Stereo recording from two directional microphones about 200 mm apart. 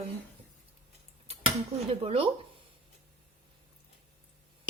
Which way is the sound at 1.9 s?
30° right (ahead or behind).